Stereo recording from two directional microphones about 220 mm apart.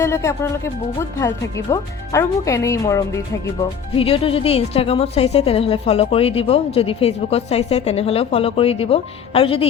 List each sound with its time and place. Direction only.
0.0 s speech: 10° left (ahead or behind)
3.6 s speech: 25° left (ahead or behind)